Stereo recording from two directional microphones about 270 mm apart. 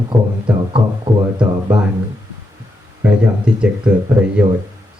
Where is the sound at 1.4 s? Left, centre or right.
Centre.